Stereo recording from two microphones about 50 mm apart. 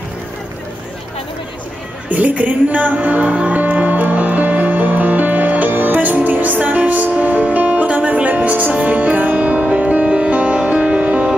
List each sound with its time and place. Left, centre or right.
2.0 s a woman's voice: right
3.4 s music: right